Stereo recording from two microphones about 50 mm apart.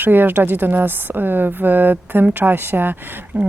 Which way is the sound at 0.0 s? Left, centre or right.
Right.